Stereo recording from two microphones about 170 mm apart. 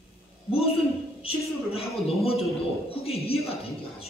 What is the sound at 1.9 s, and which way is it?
A man's voice, 35° left (ahead or behind).